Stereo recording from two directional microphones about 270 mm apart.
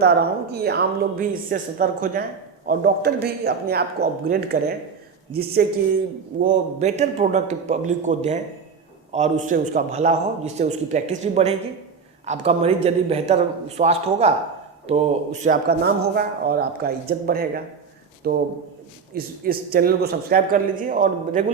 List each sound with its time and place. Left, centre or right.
0.0 s a man's voice: right